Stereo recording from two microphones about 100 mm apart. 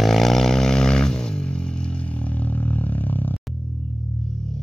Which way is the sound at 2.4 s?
25° left (ahead or behind).